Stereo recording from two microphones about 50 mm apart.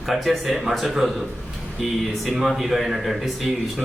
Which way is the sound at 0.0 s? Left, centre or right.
Centre.